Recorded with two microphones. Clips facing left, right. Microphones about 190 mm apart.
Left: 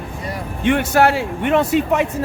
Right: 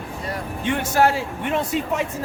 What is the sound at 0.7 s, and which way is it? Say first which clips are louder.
Speech: left 4 dB; 70° left (ahead or behind).